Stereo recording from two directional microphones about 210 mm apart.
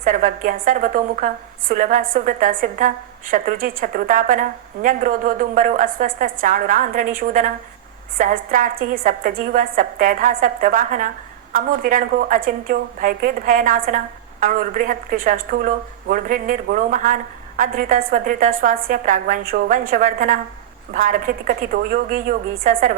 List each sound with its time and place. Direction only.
0.0 s a woman's voice: 40° right (ahead or behind)